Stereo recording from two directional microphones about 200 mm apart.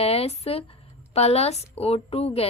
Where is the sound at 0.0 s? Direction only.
30° left (ahead or behind).